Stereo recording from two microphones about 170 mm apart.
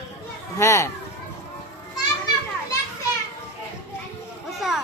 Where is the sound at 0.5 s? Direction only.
15° left (ahead or behind).